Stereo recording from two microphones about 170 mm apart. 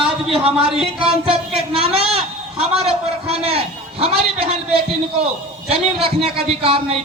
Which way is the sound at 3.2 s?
35° right (ahead or behind).